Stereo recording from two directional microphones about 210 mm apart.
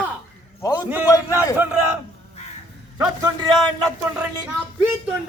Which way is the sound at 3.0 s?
15° right (ahead or behind).